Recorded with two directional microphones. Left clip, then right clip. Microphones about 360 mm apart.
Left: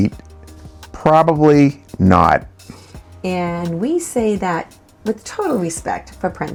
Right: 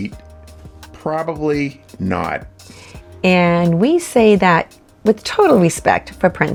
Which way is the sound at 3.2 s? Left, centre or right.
Right.